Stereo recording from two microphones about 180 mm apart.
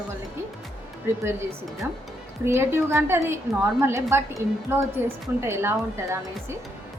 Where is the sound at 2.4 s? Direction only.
15° right (ahead or behind).